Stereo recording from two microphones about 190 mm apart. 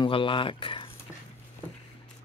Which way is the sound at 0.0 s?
25° left (ahead or behind).